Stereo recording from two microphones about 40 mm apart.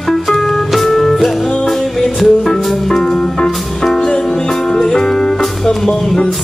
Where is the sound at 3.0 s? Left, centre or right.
Centre.